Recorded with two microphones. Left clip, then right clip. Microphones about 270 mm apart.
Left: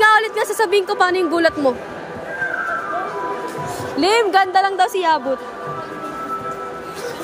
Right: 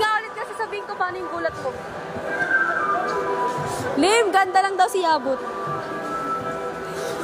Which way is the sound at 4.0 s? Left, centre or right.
Centre.